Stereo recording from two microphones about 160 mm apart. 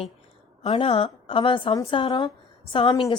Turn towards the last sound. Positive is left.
turn(degrees=30)  # may be behind; listen again after turning